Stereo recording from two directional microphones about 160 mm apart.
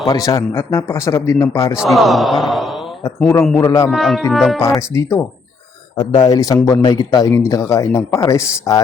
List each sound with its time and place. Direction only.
0.0 s speech: 25° left (ahead or behind)
1.8 s mantra: centre (ahead or behind)
3.6 s speech: 20° left (ahead or behind)
3.8 s mantra: centre (ahead or behind)
4.9 s speech: 15° left (ahead or behind)